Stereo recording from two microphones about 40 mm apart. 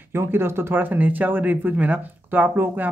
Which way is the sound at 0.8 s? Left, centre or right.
Right.